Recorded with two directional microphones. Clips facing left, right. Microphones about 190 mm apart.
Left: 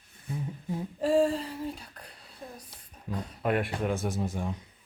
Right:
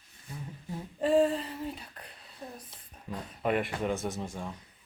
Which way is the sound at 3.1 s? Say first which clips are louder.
Left 1 dB; centre (ahead or behind).